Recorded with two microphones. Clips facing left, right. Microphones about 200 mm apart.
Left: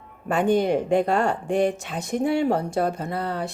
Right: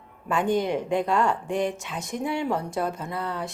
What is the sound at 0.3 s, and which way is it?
Speech, 65° left (ahead or behind).